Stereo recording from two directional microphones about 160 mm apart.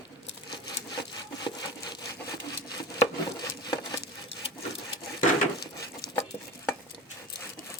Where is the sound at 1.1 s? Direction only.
25° left (ahead or behind).